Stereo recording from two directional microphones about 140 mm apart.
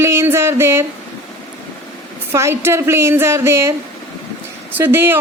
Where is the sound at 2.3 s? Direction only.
20° right (ahead or behind).